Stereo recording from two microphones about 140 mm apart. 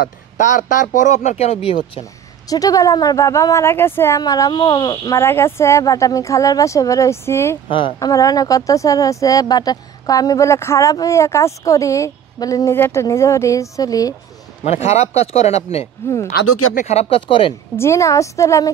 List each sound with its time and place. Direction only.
0.0 s speech: 75° left (ahead or behind); by 2.0 s 40° left (ahead or behind)
2.4 s speech: 25° left (ahead or behind)
4.2 s speech: 30° left (ahead or behind)
5.1 s speech: 15° left (ahead or behind)
7.6 s speech: 35° left (ahead or behind)
8.1 s speech: 25° left (ahead or behind)
14.6 s speech: 55° left (ahead or behind)
17.7 s speech: 20° left (ahead or behind)